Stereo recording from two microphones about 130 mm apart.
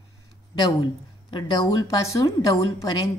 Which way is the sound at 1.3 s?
30° left (ahead or behind).